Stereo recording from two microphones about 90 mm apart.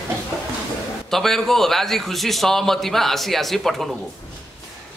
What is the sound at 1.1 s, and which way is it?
A man's voice, 5° left (ahead or behind).